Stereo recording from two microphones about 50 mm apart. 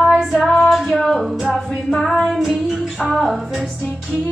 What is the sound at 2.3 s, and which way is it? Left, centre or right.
Music, centre.